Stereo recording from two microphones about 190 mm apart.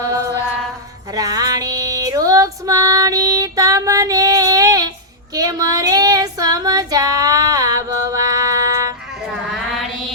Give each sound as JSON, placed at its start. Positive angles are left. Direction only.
{"t": 0.0, "sound": "mantra", "side_deg": -20}
{"t": 1.1, "sound": "female singing", "side_deg": -20}
{"t": 5.3, "sound": "child singing", "side_deg": -20}